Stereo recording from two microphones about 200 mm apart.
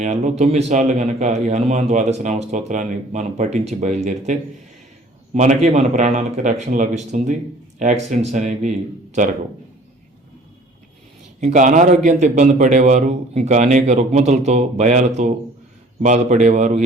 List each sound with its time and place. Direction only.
0.0 s a man's voice: 35° right (ahead or behind)
11.3 s a man's voice: 40° right (ahead or behind)